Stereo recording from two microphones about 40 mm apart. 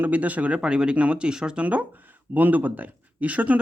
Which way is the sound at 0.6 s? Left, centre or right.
Right.